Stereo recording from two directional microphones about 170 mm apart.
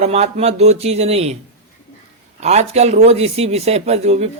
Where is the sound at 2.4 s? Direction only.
40° right (ahead or behind).